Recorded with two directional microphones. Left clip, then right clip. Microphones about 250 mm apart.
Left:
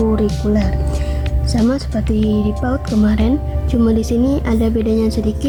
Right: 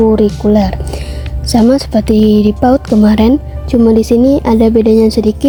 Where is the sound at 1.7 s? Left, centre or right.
Right.